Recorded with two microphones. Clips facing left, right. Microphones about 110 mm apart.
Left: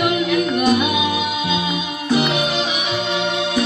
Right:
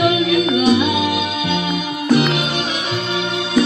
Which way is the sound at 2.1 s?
15° left (ahead or behind).